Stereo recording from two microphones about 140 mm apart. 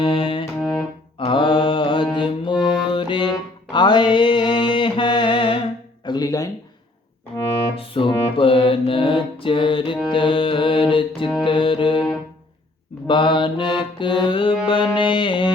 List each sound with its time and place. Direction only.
0.0 s music: 40° left (ahead or behind)
0.6 s music: centre (ahead or behind)
1.2 s mantra: 35° left (ahead or behind)
2.8 s music: 35° left (ahead or behind)
6.1 s a sound: 25° left (ahead or behind)
7.8 s music: 40° left (ahead or behind)
10.1 s mantra: 40° left (ahead or behind)
11.4 s music: 40° left (ahead or behind)
13.1 s mantra: 35° left (ahead or behind)
14.7 s a sound: 35° left (ahead or behind)